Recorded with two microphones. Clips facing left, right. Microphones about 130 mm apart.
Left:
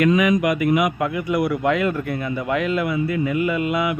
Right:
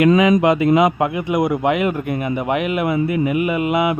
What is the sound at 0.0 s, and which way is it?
A man's voice, 25° right (ahead or behind).